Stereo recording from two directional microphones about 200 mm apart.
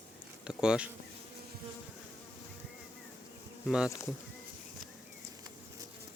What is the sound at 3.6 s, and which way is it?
Speech, 5° right (ahead or behind).